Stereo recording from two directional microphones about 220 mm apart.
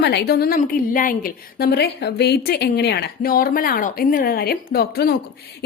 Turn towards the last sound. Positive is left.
turn(degrees=45)  # may be behind; listen again after turning